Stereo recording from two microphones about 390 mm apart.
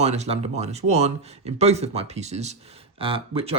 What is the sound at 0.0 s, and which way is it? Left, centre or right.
Speech, centre.